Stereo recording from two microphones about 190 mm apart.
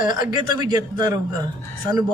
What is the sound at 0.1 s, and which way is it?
A man's voice, 20° right (ahead or behind).